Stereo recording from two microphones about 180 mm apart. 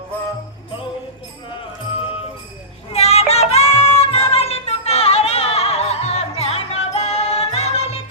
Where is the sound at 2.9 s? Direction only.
35° left (ahead or behind).